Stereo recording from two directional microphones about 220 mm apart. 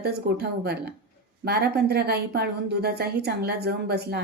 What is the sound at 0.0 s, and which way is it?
A woman's voice, 45° right (ahead or behind).